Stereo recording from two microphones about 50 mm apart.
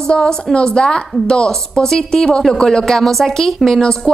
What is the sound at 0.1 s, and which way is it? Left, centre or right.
A woman's voice, centre.